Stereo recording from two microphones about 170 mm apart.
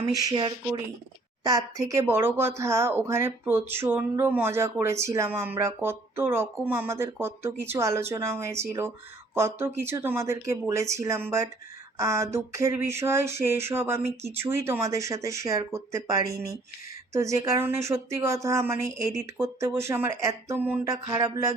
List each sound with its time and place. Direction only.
0.2 s speech: 25° right (ahead or behind)